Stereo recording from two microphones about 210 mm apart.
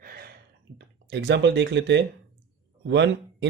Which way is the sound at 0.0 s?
45° right (ahead or behind).